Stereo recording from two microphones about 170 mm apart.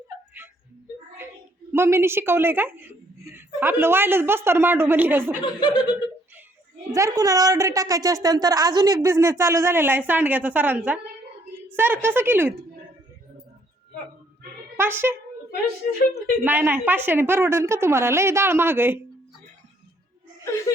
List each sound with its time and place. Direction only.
0.4 s music: 15° right (ahead or behind)
1.7 s a woman's voice: 15° right (ahead or behind)
5.5 s speech: 25° left (ahead or behind)
6.9 s a woman's voice: 20° right (ahead or behind)
14.8 s a woman's voice: 15° right (ahead or behind)
16.4 s a woman's voice: 10° right (ahead or behind)
20.4 s chuckle: 15° left (ahead or behind)